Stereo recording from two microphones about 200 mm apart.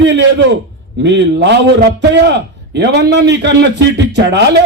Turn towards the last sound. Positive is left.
turn(degrees=-60)  # may be behind; listen again after turning